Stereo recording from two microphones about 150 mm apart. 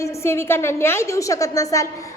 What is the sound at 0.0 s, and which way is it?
A woman's voice, 15° left (ahead or behind).